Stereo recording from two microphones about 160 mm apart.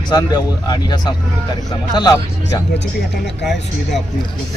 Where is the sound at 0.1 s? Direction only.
25° left (ahead or behind).